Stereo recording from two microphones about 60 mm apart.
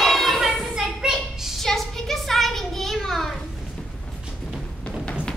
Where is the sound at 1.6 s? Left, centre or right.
Centre.